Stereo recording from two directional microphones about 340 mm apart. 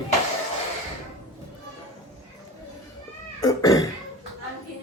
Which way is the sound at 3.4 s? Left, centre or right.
Centre.